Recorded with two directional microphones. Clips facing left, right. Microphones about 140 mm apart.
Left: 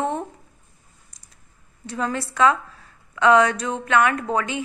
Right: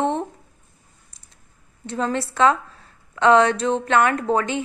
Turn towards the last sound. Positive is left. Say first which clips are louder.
# right 3 dB
turn(degrees=-35)  # may be behind; listen again after turning